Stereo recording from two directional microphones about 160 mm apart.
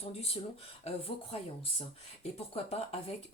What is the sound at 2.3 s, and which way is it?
Speech, 40° left (ahead or behind).